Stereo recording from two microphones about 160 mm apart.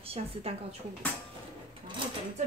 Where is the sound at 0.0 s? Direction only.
35° right (ahead or behind).